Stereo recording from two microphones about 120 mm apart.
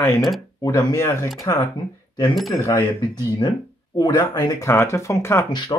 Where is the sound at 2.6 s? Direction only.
25° left (ahead or behind).